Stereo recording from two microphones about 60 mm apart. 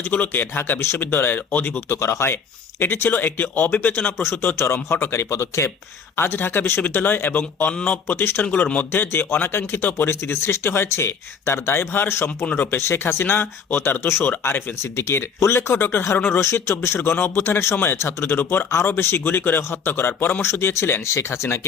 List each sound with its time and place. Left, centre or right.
0.0 s a man's voice: left
0.5 s speech: left
2.0 s speech: left
4.2 s speech: left
7.7 s speech: centre
8.0 s speech: left
8.4 s a man's voice: left
14.8 s speech: left